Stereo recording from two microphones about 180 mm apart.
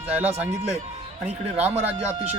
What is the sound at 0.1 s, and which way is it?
Speech, 5° right (ahead or behind).